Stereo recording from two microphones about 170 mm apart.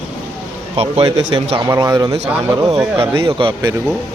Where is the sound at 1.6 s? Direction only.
20° right (ahead or behind).